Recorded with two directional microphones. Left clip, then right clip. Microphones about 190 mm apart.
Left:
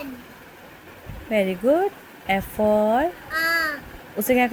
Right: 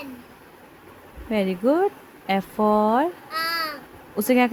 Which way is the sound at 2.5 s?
25° right (ahead or behind).